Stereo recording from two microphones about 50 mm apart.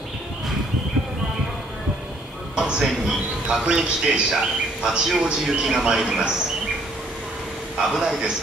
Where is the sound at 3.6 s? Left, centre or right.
Centre.